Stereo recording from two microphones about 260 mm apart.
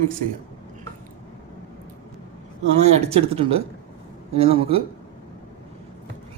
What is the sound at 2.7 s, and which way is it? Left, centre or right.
A man's voice, right.